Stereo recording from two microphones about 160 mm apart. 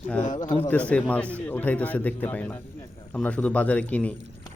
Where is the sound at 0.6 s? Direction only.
10° left (ahead or behind).